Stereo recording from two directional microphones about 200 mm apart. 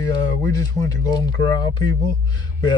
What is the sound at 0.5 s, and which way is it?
Speech, 20° left (ahead or behind).